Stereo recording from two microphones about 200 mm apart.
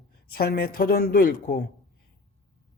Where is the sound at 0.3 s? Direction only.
50° left (ahead or behind).